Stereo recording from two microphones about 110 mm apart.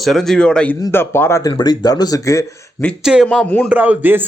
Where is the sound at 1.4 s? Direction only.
40° left (ahead or behind).